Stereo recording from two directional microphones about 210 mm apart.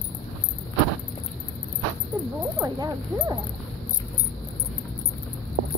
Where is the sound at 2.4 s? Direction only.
15° right (ahead or behind).